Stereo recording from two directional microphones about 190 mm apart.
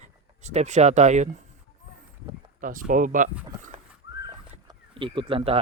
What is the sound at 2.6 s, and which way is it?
Speech, 45° right (ahead or behind).